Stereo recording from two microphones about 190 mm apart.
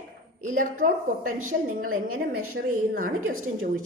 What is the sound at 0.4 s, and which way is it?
A woman's voice, 45° right (ahead or behind).